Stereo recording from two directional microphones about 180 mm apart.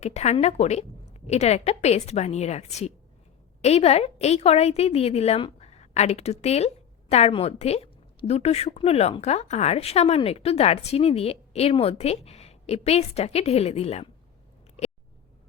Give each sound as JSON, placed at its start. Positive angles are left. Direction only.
{"t": 0.0, "sound": "a woman's voice", "side_deg": 40}